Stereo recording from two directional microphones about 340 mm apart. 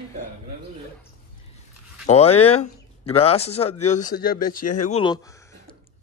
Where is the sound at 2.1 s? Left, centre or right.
Centre.